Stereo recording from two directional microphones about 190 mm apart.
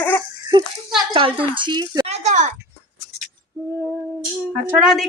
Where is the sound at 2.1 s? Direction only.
40° right (ahead or behind).